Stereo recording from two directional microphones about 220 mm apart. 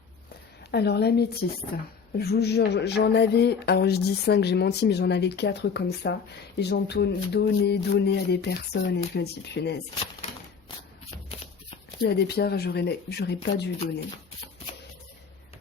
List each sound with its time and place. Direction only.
0.7 s speech: 50° left (ahead or behind)
12.0 s speech: 45° left (ahead or behind)